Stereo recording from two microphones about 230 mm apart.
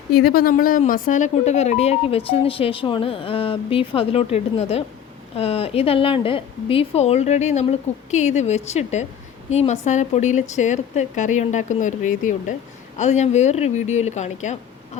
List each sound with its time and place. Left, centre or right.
0.1 s speech: left